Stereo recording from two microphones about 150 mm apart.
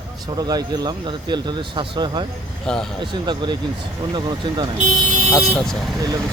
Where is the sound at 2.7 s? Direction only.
5° left (ahead or behind).